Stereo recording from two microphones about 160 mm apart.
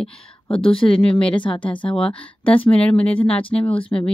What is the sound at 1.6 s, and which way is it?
Speech, 30° left (ahead or behind).